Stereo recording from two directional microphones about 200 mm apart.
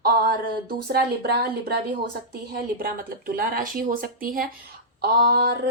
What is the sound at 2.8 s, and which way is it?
A woman's voice, 45° right (ahead or behind).